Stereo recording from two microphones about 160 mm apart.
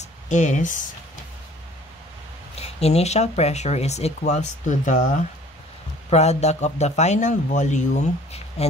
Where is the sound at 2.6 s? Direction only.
40° left (ahead or behind).